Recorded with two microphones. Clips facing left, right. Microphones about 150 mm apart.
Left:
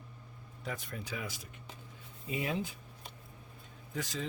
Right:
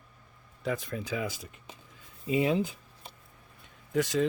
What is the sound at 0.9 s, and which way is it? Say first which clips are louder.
Speech: right 7 dB; 90° right.